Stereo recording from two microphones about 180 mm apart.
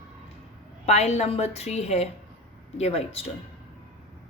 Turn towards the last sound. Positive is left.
turn(degrees=35)  # may be behind; listen again after turning